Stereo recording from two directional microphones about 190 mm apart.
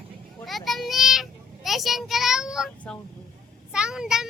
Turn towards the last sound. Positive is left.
turn(degrees=-5)  # may be behind; listen again after turning